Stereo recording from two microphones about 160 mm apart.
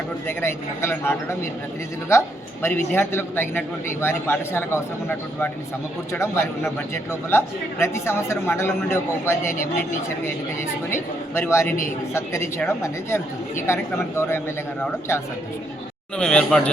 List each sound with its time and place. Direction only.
0.3 s a man's voice: 15° left (ahead or behind)
10.9 s a man's voice: 15° left (ahead or behind)